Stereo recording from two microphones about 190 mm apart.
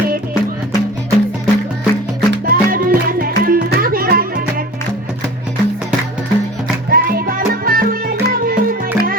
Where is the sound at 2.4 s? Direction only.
50° right (ahead or behind).